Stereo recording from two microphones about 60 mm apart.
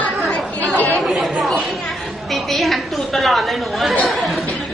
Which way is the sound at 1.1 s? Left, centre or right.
Centre.